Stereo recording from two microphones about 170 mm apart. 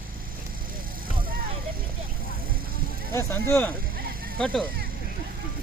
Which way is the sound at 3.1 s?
15° left (ahead or behind).